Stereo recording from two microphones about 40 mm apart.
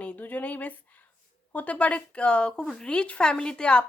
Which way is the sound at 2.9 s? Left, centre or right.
Left.